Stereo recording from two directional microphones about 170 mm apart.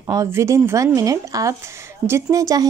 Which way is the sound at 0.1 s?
20° right (ahead or behind).